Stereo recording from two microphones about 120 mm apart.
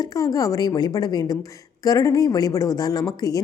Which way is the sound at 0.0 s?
30° left (ahead or behind).